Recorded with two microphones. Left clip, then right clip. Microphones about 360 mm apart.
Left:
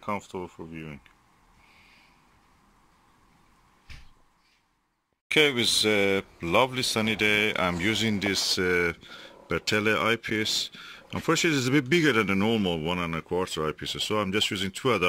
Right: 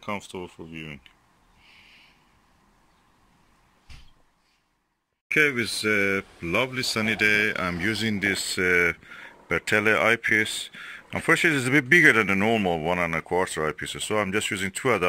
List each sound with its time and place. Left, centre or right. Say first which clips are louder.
0.0 s speech: even; centre
5.3 s speech: even; centre